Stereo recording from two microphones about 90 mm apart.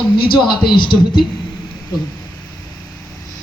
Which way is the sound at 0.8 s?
65° left (ahead or behind).